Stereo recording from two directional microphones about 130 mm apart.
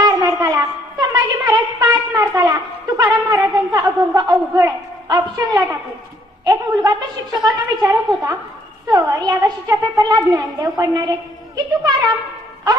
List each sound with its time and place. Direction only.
0.0 s wind instrument: 30° right (ahead or behind)
2.3 s a woman's voice: 30° right (ahead or behind)